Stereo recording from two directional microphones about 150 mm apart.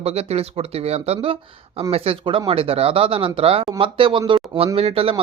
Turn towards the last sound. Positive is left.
turn(degrees=-40)  # may be behind; listen again after turning